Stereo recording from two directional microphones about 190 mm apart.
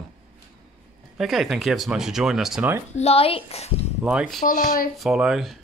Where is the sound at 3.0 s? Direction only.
30° left (ahead or behind).